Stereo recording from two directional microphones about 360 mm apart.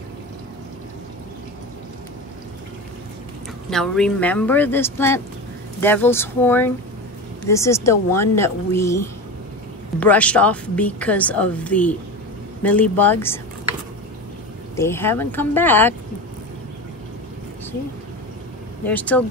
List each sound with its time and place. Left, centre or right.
3.7 s a woman's voice: centre
14.8 s a woman's voice: centre
18.9 s a woman's voice: centre